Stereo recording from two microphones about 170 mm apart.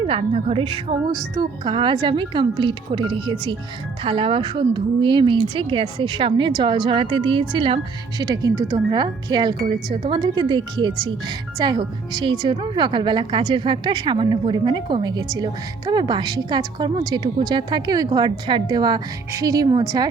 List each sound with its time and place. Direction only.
0.0 s a woman's voice: 35° right (ahead or behind)